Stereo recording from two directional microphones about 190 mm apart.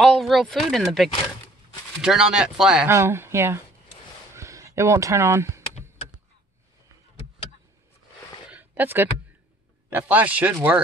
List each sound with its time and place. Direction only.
0.0 s speech: centre (ahead or behind)
2.9 s speech: 15° right (ahead or behind)
8.5 s a sound: 10° right (ahead or behind)
9.8 s speech: 10° right (ahead or behind)